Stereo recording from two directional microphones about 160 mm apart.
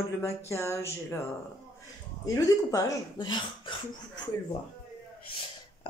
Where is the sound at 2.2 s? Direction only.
20° left (ahead or behind).